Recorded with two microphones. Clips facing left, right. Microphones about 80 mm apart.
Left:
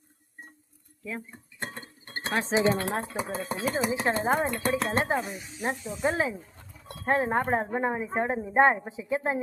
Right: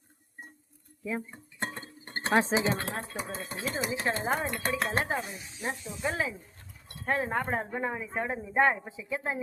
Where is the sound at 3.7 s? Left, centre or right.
Left.